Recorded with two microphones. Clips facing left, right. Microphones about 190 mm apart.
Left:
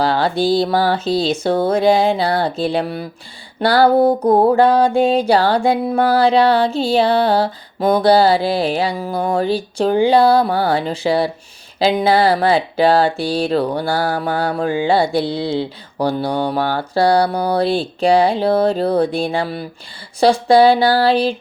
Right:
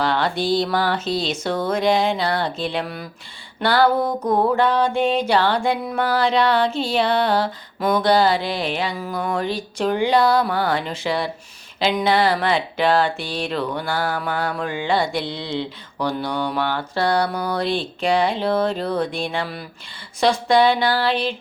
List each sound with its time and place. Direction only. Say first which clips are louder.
0.0 s mantra: left 5 dB; 35° left (ahead or behind)
0.6 s music: left 5 dB; 35° left (ahead or behind)